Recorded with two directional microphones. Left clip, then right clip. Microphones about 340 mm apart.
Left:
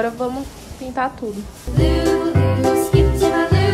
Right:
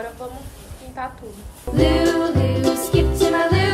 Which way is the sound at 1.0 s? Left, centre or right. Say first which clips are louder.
Left 8 dB; left.